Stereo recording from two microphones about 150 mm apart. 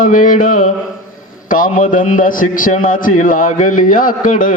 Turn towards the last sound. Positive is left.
turn(degrees=65)  # may be behind; listen again after turning